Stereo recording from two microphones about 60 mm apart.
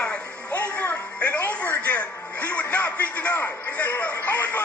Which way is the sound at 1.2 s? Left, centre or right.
Left.